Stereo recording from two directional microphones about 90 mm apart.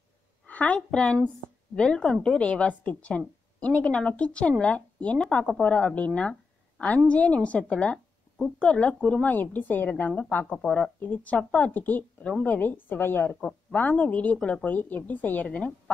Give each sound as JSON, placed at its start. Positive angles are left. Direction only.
{"t": 0.5, "sound": "speech", "side_deg": 15}